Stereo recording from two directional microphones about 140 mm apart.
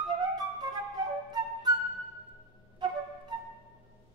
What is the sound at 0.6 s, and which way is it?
Flute, 30° right (ahead or behind).